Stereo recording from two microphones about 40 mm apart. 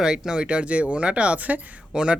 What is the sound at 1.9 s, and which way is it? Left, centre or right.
Speech, right.